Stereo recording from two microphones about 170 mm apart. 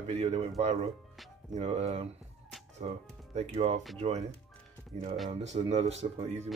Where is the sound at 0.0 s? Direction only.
40° right (ahead or behind).